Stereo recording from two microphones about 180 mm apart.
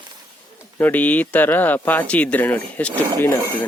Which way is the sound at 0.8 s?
10° left (ahead or behind).